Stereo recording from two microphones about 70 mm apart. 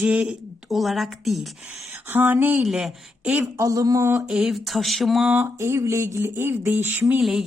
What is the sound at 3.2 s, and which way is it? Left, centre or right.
Speech, right.